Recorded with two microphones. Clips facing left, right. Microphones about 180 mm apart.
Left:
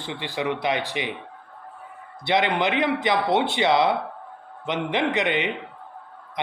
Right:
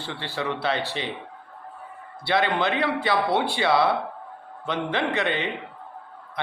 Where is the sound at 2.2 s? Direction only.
20° left (ahead or behind).